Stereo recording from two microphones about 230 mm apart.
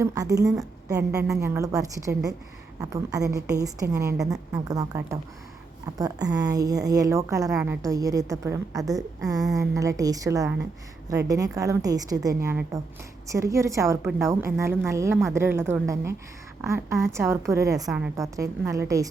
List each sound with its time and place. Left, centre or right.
0.0 s a woman's voice: centre